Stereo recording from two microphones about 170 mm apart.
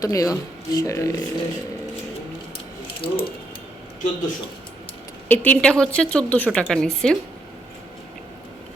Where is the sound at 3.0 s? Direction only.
65° left (ahead or behind).